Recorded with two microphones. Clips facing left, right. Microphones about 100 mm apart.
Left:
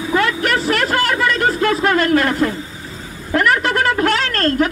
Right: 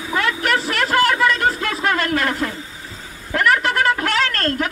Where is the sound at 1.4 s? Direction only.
40° left (ahead or behind).